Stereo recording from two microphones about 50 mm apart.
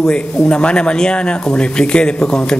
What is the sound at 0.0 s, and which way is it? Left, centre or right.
Speech, centre.